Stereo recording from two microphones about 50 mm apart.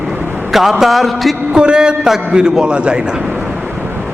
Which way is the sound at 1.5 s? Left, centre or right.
Centre.